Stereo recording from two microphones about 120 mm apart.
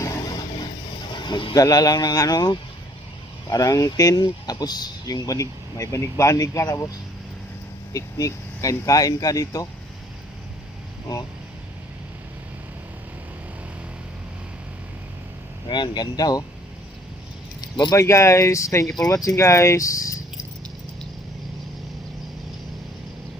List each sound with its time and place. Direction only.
0.0 s vehicle: 30° left (ahead or behind)
1.1 s a sound: 40° left (ahead or behind)
1.5 s speech: 30° left (ahead or behind)
7.9 s speech: 30° left (ahead or behind)
15.7 s speech: 35° left (ahead or behind)
17.6 s keys jangling: 40° left (ahead or behind)
17.9 s speech: 25° left (ahead or behind)